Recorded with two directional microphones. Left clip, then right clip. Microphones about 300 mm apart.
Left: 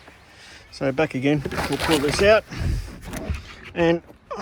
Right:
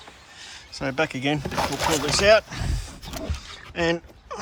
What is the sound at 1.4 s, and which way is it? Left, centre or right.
Speech, right.